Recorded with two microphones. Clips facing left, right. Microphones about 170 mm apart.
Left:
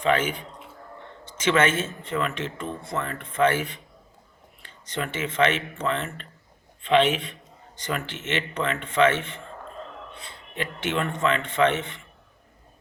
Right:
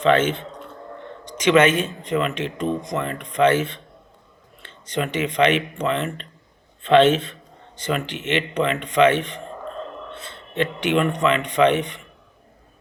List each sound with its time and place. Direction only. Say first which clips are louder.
0.1 s speech: right 5 dB; 25° right (ahead or behind)
4.9 s speech: right 4 dB; 15° right (ahead or behind)
7.9 s speech: right 5 dB; 15° right (ahead or behind)
10.8 s speech: right 5 dB; 20° right (ahead or behind)